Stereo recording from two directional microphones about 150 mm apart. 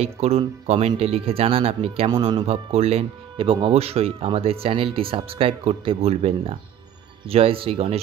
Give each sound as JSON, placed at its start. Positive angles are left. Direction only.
{"t": 0.0, "sound": "speech", "side_deg": -40}